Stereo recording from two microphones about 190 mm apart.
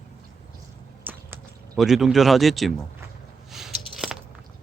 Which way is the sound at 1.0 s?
10° right (ahead or behind).